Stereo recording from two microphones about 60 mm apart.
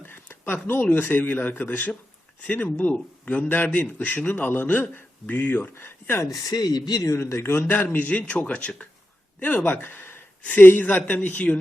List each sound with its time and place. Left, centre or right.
0.0 s a man's voice: left
6.3 s speech: left
7.2 s a man's voice: left
7.9 s a man's voice: left